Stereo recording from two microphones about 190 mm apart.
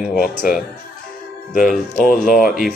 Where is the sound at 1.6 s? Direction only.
Centre (ahead or behind).